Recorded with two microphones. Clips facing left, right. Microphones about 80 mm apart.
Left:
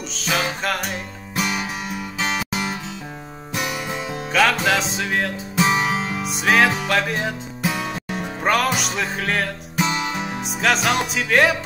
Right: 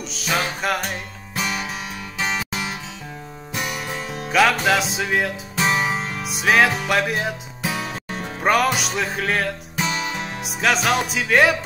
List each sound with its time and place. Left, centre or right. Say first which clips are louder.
0.1 s music: even; centre
1.3 s music: left 2 dB; centre
9.8 s music: right 1 dB; centre
10.4 s music: even; centre